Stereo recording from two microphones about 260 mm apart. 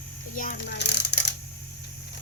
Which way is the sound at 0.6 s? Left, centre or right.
Left.